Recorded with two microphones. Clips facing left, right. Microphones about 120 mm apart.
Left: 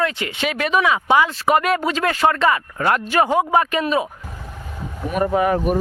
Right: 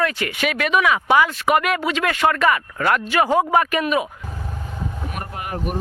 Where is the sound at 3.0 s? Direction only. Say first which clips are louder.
Left 1 dB; 40° left (ahead or behind).